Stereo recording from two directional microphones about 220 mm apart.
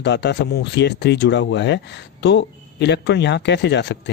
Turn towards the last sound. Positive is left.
turn(degrees=50)  # may be behind; listen again after turning